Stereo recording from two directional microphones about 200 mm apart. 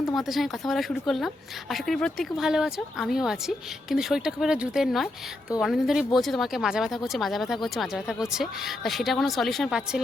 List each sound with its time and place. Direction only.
0.0 s speech: centre (ahead or behind)